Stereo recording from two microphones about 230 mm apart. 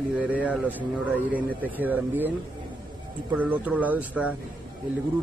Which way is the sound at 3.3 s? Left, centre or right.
Centre.